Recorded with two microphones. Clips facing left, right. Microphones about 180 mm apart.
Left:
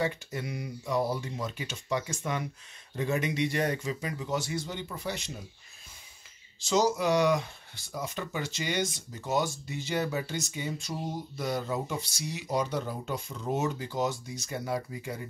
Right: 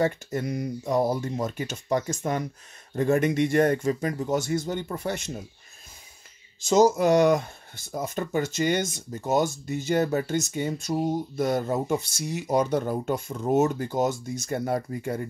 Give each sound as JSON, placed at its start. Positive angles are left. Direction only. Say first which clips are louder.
{"t": 0.0, "sound": "speech", "louder": "right 6 dB", "side_deg": -45}
{"t": 6.6, "sound": "speech", "louder": "right 7 dB", "side_deg": -45}